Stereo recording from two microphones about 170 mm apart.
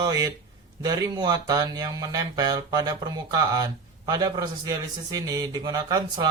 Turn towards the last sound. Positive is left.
turn(degrees=-20)  # may be behind; listen again after turning